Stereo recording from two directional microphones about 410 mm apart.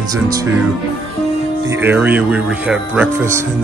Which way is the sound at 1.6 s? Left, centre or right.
Centre.